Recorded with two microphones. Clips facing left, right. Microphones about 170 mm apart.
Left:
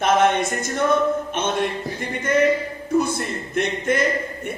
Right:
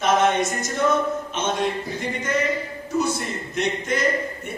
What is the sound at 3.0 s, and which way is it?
Music, 55° left (ahead or behind).